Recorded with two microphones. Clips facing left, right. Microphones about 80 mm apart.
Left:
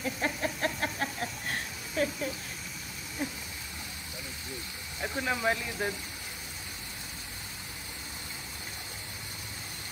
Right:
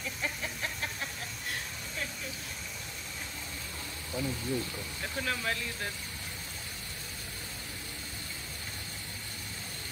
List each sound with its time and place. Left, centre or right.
0.0 s a sound: left
2.0 s vehicle: left
5.0 s speech: centre